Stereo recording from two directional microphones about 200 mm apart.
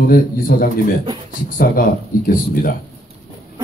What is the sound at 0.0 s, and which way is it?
Speech, 45° left (ahead or behind).